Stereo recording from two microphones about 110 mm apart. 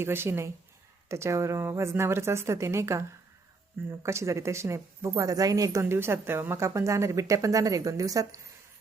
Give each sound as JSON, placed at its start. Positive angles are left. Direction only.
{"t": 0.0, "sound": "speech", "side_deg": -20}